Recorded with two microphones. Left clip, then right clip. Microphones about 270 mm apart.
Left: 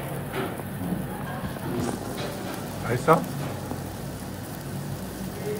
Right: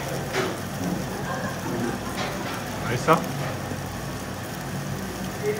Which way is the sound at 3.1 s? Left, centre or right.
Centre.